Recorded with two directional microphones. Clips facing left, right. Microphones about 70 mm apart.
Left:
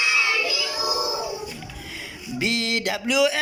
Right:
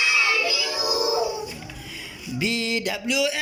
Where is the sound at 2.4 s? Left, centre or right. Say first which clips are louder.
Even; left.